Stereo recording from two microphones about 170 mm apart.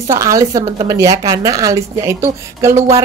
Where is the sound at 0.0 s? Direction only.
15° right (ahead or behind).